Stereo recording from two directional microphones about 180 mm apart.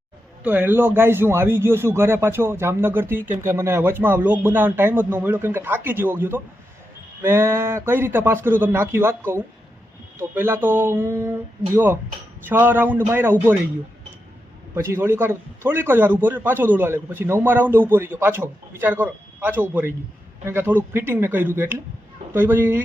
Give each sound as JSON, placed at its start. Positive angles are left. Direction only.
{"t": 0.4, "sound": "a man's voice", "side_deg": -10}
{"t": 14.8, "sound": "a man's voice", "side_deg": -15}